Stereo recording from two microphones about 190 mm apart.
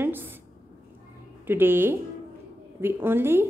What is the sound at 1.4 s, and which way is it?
A woman's voice, 10° right (ahead or behind).